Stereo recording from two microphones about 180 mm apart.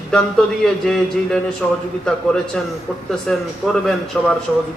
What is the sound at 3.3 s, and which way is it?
A man's voice, centre (ahead or behind).